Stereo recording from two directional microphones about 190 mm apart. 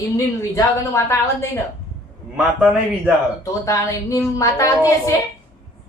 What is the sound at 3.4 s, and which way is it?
A woman's voice, 15° left (ahead or behind).